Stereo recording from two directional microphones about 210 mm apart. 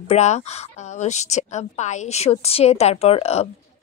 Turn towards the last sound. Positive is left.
turn(degrees=30)  # may be behind; listen again after turning